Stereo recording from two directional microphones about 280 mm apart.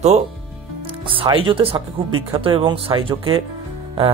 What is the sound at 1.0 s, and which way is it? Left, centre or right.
Speech, centre.